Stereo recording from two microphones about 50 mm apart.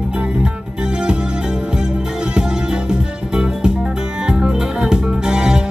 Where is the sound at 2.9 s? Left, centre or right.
Centre.